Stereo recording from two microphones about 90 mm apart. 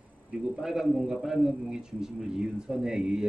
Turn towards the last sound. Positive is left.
turn(degrees=-5)  # may be behind; listen again after turning